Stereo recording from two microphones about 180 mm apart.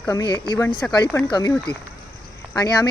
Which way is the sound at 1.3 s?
20° left (ahead or behind).